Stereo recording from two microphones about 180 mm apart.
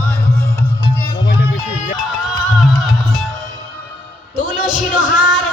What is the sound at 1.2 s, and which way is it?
Music, 65° left (ahead or behind).